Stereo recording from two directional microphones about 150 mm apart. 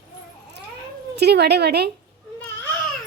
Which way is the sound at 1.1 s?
90° right.